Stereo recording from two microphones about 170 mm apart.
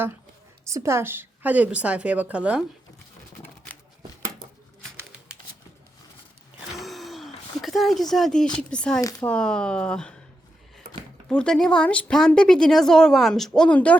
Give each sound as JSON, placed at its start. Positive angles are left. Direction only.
{"t": 0.6, "sound": "a woman's voice", "side_deg": -15}
{"t": 6.7, "sound": "a sound", "side_deg": 0}
{"t": 8.1, "sound": "speech", "side_deg": 0}
{"t": 9.0, "sound": "speech", "side_deg": 20}
{"t": 9.2, "sound": "speech", "side_deg": 5}
{"t": 11.3, "sound": "speech", "side_deg": 5}